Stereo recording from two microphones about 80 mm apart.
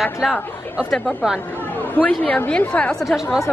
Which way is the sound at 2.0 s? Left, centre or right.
Centre.